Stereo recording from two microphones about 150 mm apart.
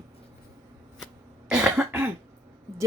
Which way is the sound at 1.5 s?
5° right (ahead or behind).